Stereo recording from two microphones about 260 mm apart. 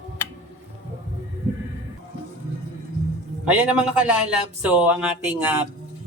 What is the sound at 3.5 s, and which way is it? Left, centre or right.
Speech, centre.